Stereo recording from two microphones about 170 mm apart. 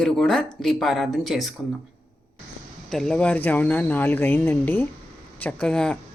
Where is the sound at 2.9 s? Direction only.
5° left (ahead or behind).